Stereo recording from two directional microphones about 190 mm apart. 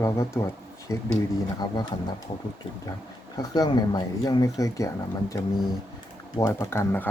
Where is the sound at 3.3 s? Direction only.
20° left (ahead or behind).